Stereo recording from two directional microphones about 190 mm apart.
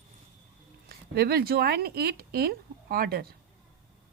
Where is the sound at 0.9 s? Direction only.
55° right (ahead or behind).